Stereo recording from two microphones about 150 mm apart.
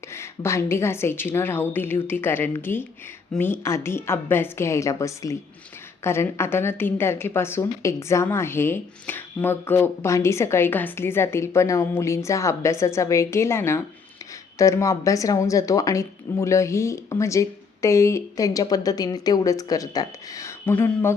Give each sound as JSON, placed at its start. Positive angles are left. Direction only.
{"t": 0.1, "sound": "a woman's voice", "side_deg": 15}